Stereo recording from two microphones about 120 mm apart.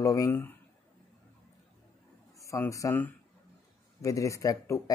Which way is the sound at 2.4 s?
25° left (ahead or behind).